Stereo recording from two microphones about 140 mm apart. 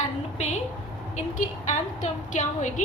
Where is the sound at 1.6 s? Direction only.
60° left (ahead or behind).